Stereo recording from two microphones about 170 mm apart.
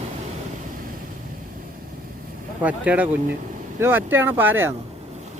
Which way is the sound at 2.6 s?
10° right (ahead or behind).